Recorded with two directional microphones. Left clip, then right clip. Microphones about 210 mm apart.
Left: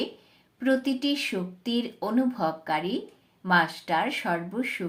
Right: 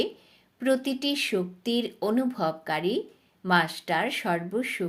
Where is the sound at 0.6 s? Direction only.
40° right (ahead or behind).